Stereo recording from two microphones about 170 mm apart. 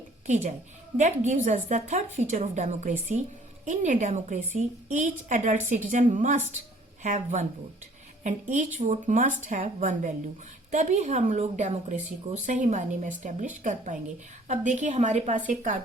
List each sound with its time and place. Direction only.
0.9 s a woman's voice: 45° right (ahead or behind)